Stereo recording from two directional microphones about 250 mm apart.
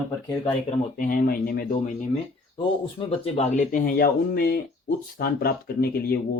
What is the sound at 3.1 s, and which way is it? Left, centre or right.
Speech, left.